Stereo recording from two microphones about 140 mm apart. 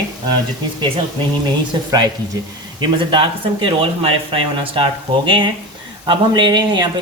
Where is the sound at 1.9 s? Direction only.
25° right (ahead or behind).